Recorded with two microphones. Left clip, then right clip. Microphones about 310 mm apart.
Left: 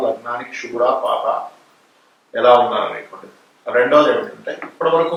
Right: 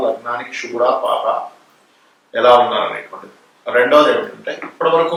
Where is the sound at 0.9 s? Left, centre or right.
Left.